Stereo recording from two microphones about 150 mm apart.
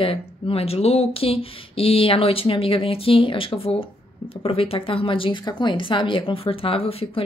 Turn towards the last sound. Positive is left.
turn(degrees=40)  # may be behind; listen again after turning